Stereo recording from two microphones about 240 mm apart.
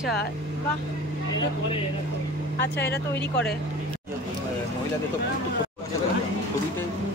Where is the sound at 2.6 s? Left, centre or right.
Left.